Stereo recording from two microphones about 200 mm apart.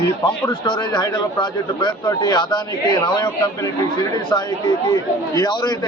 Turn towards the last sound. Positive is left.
turn(degrees=20)  # may be behind; listen again after turning